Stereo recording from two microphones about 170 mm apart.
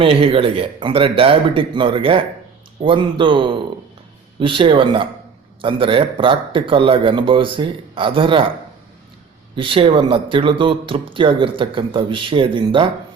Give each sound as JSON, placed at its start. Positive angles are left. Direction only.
{"t": 0.0, "sound": "speech", "side_deg": -35}
{"t": 9.6, "sound": "speech", "side_deg": -30}